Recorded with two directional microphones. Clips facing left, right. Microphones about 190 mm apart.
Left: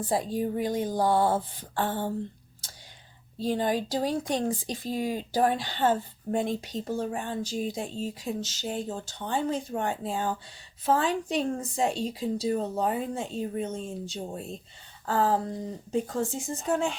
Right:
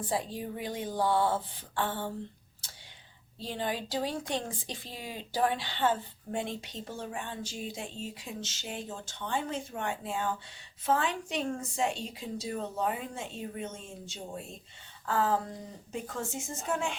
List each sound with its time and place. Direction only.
0.1 s speech: 40° left (ahead or behind)
3.3 s speech: 40° left (ahead or behind)